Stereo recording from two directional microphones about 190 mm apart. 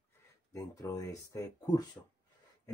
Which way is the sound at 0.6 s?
20° left (ahead or behind).